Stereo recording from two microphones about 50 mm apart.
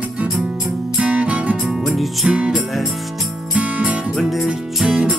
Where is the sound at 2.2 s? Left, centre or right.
Centre.